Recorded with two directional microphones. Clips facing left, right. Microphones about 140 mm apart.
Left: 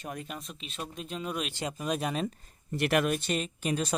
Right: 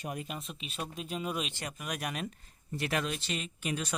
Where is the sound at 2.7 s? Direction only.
65° left (ahead or behind); by 3.9 s 35° left (ahead or behind).